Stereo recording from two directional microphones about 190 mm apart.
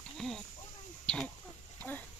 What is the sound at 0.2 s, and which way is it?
Speech, centre (ahead or behind).